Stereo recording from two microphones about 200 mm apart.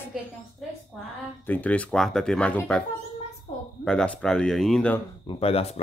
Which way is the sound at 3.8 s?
5° left (ahead or behind).